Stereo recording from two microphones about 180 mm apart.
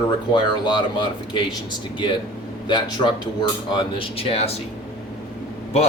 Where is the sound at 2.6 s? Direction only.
25° left (ahead or behind).